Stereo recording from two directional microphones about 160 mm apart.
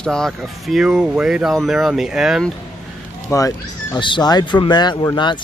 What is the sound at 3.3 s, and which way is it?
Speech, 20° left (ahead or behind).